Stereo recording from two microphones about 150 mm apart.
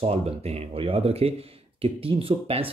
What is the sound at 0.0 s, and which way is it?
Speech, 45° right (ahead or behind).